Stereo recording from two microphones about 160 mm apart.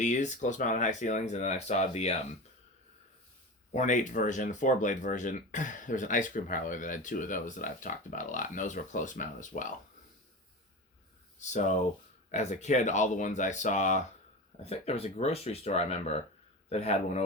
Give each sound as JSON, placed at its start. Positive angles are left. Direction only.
{"t": 0.0, "sound": "speech", "side_deg": 50}
{"t": 3.7, "sound": "speech", "side_deg": 50}
{"t": 11.3, "sound": "speech", "side_deg": 50}